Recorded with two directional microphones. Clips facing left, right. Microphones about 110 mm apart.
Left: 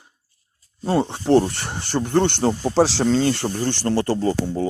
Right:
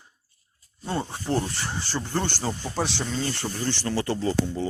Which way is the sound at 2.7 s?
90° left.